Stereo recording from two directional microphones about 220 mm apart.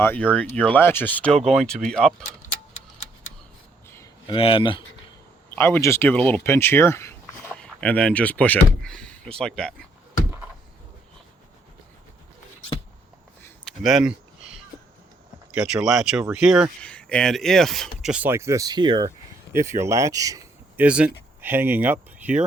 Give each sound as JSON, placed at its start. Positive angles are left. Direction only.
{"t": 0.0, "sound": "speech", "side_deg": 10}
{"t": 3.8, "sound": "a sound", "side_deg": 15}
{"t": 4.4, "sound": "speech", "side_deg": 25}
{"t": 5.5, "sound": "speech", "side_deg": 10}
{"t": 13.4, "sound": "a sound", "side_deg": 0}
{"t": 15.5, "sound": "speech", "side_deg": -5}